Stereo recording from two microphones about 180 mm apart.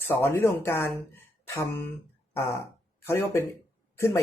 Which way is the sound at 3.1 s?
15° left (ahead or behind).